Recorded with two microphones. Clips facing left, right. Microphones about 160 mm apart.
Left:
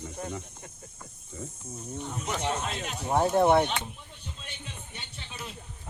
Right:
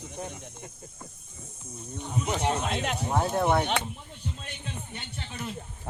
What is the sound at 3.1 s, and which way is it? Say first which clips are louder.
Speech: left 4 dB; 20° left (ahead or behind).